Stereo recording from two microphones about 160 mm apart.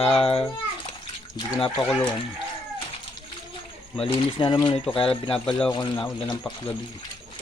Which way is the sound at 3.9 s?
35° left (ahead or behind).